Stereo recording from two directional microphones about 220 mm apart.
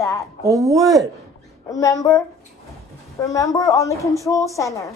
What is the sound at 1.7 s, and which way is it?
Speech, 15° left (ahead or behind).